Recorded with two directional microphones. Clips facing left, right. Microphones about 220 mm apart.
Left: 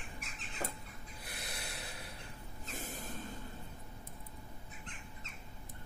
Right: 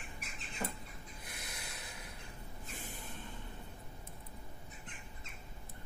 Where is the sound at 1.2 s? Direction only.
35° left (ahead or behind).